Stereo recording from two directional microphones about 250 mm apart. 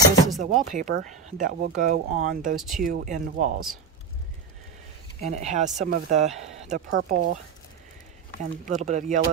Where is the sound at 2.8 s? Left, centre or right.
Right.